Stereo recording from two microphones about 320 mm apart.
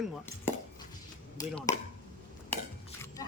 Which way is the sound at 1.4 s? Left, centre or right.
Centre.